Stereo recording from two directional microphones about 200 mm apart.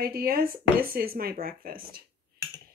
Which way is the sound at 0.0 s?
50° right (ahead or behind).